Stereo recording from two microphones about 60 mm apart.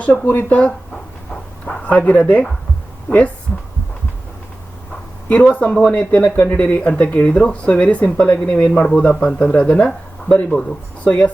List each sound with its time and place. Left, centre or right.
0.0 s speech: left
1.3 s a sound: centre
3.1 s speech: left
5.3 s speech: left